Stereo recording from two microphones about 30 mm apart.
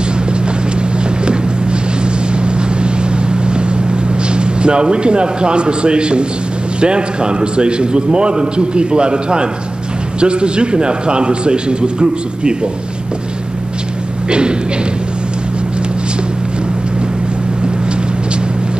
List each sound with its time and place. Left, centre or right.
1.2 s boat: right
4.3 s a man's voice: right